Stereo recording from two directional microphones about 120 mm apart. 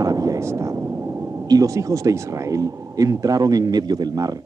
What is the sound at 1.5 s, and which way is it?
Speech, 30° right (ahead or behind).